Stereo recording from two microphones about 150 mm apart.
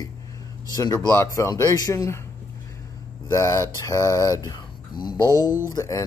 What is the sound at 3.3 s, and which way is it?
Speech, 20° left (ahead or behind).